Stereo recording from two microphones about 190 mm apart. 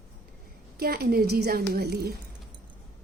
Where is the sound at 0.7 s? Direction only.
55° right (ahead or behind).